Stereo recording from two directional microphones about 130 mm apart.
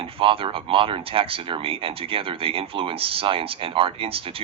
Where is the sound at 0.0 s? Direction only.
45° right (ahead or behind).